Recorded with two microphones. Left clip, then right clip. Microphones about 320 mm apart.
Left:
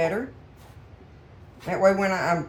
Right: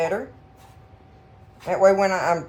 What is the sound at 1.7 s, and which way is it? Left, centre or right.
Speech, centre.